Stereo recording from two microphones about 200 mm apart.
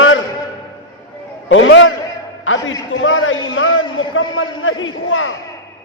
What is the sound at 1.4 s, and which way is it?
A man's voice, 75° left (ahead or behind).